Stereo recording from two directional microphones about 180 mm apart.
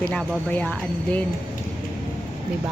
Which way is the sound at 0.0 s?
5° left (ahead or behind).